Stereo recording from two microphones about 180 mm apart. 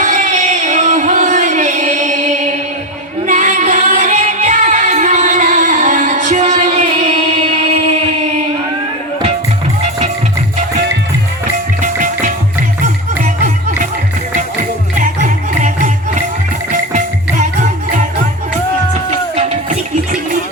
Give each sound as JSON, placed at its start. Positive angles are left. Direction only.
{"t": 0.0, "sound": "music", "side_deg": -45}
{"t": 11.8, "sound": "music", "side_deg": -45}
{"t": 14.9, "sound": "music", "side_deg": -45}